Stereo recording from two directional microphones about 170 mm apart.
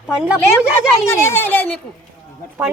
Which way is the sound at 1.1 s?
15° left (ahead or behind).